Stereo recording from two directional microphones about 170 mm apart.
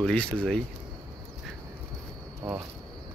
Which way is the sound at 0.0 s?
5° left (ahead or behind).